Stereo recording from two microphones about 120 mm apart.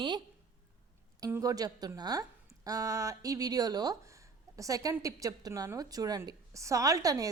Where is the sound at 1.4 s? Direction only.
30° right (ahead or behind).